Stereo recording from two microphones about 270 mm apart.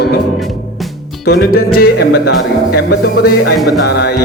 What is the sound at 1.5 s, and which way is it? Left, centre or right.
Music, left.